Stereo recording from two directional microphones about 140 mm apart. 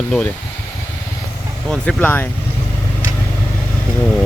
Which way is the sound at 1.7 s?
5° left (ahead or behind).